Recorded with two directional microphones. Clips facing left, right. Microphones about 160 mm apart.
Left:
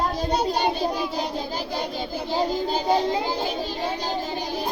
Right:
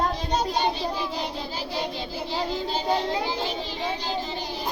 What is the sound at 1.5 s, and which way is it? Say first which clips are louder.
Child singing: left 2 dB; 45° left (ahead or behind).